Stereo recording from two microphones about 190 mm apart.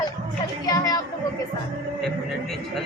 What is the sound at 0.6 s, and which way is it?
Speech, 20° left (ahead or behind).